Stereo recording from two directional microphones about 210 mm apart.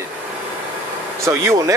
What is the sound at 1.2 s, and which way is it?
Speech, 15° right (ahead or behind).